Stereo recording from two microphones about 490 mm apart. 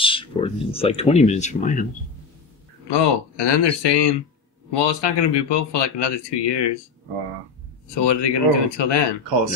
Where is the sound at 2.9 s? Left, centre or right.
Left.